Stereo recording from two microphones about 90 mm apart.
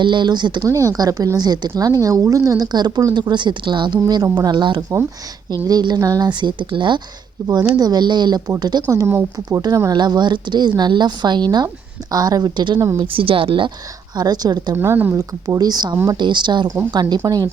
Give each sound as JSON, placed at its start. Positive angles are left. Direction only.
{"t": 0.0, "sound": "a woman's voice", "side_deg": -60}
{"t": 0.7, "sound": "a woman's voice", "side_deg": -40}
{"t": 6.2, "sound": "a woman's voice", "side_deg": -60}
{"t": 7.8, "sound": "a woman's voice", "side_deg": -50}
{"t": 13.0, "sound": "a woman's voice", "side_deg": -80}
{"t": 14.2, "sound": "a woman's voice", "side_deg": -50}
{"t": 14.8, "sound": "speech", "side_deg": -25}
{"t": 15.1, "sound": "a woman's voice", "side_deg": -45}